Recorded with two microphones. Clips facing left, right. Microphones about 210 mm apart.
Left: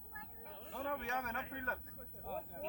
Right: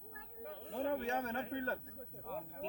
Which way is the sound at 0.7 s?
30° right (ahead or behind).